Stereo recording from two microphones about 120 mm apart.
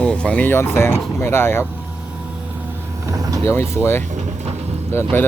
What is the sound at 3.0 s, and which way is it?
Speech, 30° right (ahead or behind).